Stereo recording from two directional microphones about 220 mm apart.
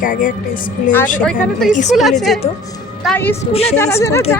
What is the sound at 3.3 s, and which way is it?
Speech, 25° left (ahead or behind).